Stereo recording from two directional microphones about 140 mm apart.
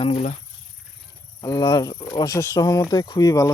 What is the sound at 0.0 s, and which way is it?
Speech, 50° left (ahead or behind).